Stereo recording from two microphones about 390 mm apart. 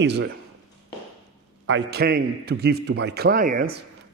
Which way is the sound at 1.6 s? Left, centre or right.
Right.